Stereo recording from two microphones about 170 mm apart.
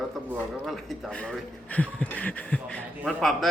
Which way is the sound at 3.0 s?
Centre (ahead or behind).